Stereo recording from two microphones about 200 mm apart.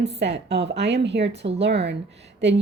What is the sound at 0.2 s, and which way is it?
A woman's voice, 60° right (ahead or behind).